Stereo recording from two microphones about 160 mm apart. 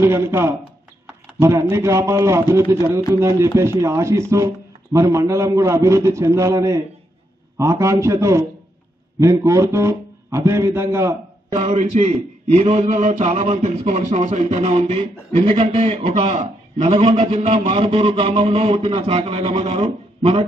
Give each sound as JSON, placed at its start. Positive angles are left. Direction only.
{"t": 0.0, "sound": "a man's voice", "side_deg": -15}
{"t": 11.6, "sound": "a man's voice", "side_deg": -45}
{"t": 17.4, "sound": "a man's voice", "side_deg": -45}
{"t": 17.6, "sound": "a man's voice", "side_deg": -35}